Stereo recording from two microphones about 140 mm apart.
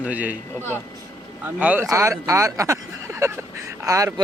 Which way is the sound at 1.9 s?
20° right (ahead or behind).